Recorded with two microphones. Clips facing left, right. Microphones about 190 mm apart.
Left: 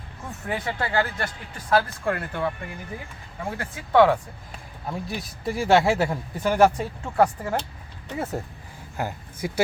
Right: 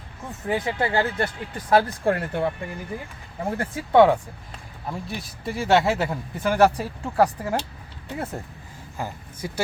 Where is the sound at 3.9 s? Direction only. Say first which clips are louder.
Right 2 dB; 20° right (ahead or behind).